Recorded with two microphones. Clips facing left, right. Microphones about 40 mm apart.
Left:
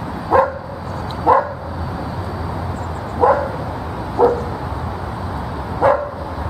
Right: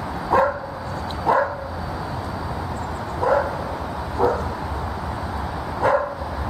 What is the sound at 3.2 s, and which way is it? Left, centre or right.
Dog, centre.